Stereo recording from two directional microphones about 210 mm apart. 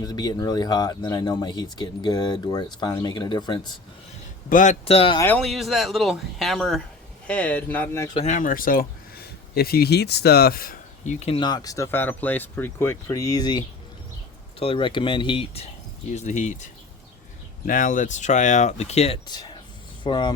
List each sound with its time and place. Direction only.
0.0 s speech: 20° left (ahead or behind)
4.4 s speech: 40° left (ahead or behind)
5.2 s speech: 5° left (ahead or behind)
8.2 s speech: 35° left (ahead or behind)
16.1 s speech: 35° left (ahead or behind)
17.7 s speech: 40° left (ahead or behind); by 20.3 s 20° left (ahead or behind)